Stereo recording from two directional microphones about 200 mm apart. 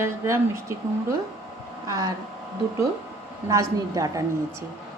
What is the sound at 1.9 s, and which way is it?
Speech, 20° right (ahead or behind).